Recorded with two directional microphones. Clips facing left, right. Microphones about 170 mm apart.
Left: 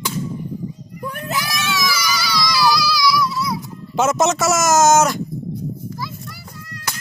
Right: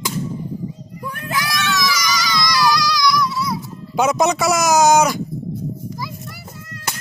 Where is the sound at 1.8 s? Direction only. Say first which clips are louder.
Right 1 dB; 5° left (ahead or behind).